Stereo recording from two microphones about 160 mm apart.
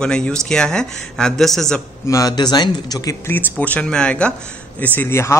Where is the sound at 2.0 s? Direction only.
20° left (ahead or behind).